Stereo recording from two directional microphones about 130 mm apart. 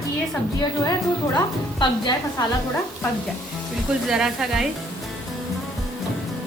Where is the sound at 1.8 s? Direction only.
35° left (ahead or behind).